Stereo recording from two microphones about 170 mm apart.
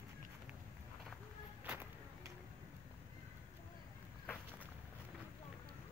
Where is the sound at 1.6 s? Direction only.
15° right (ahead or behind).